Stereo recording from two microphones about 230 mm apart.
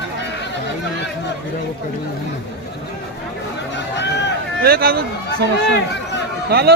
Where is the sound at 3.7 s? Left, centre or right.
Left.